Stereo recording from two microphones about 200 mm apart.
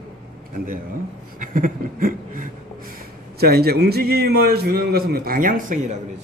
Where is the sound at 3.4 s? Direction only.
50° right (ahead or behind).